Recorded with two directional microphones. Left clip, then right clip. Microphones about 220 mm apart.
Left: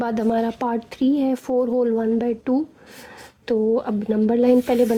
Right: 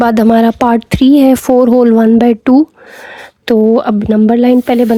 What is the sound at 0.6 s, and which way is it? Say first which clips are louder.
A woman's voice: right 13 dB; 40° right (ahead or behind).